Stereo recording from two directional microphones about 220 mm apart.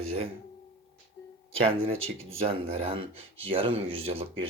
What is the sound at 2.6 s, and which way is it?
Speech, 25° right (ahead or behind).